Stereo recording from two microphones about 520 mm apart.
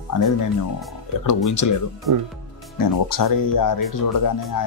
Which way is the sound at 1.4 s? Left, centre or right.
Left.